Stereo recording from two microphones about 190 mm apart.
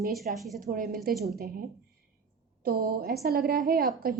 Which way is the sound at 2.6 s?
55° right (ahead or behind).